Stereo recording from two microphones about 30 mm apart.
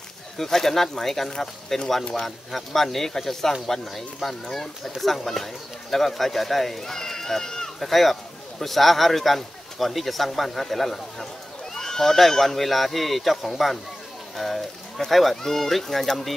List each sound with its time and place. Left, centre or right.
0.4 s speech: centre
6.8 s speech: centre
7.8 s speech: centre
11.7 s horse: centre
12.2 s speech: centre
15.4 s speech: centre